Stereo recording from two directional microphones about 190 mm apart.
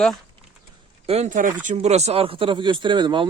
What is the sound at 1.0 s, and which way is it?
Speech, 35° right (ahead or behind).